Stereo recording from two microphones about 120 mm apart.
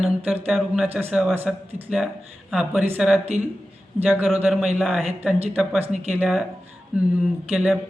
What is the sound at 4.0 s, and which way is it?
Speech, 10° right (ahead or behind).